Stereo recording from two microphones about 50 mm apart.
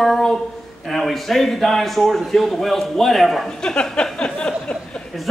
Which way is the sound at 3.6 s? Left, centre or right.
Centre.